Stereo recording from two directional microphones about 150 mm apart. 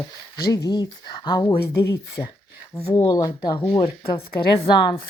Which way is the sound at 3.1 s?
25° left (ahead or behind).